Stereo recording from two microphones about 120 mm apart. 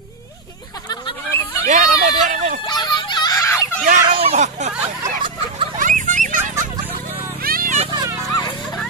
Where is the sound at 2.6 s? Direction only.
40° left (ahead or behind).